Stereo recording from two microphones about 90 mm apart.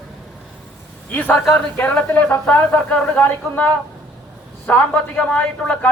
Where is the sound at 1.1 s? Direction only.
20° left (ahead or behind).